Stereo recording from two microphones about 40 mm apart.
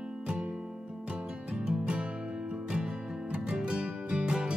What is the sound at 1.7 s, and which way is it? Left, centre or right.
Music, right.